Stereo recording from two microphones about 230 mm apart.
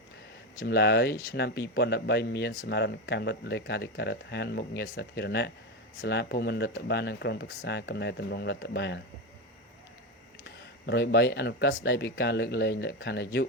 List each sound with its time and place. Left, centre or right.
0.6 s speech: left
10.4 s speech: left